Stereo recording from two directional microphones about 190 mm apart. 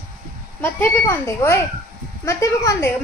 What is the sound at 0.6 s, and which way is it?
A woman's voice, 10° left (ahead or behind).